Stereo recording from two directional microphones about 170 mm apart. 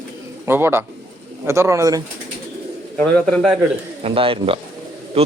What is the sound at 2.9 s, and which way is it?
Speech, 5° left (ahead or behind).